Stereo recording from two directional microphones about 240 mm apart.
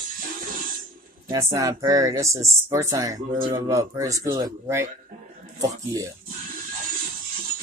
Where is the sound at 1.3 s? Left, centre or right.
Centre.